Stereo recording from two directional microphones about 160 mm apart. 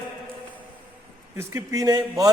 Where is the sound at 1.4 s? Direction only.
20° right (ahead or behind).